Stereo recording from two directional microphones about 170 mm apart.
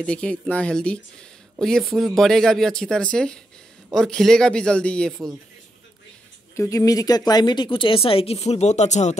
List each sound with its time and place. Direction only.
0.0 s speech: 5° left (ahead or behind)
6.5 s speech: 20° left (ahead or behind); by 9.2 s 45° left (ahead or behind)